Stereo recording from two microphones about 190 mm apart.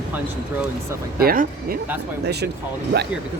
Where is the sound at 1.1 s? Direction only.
50° right (ahead or behind).